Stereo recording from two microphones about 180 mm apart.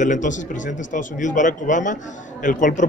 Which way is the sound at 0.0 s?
45° left (ahead or behind).